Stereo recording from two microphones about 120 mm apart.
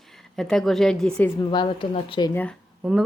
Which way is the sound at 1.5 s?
40° left (ahead or behind).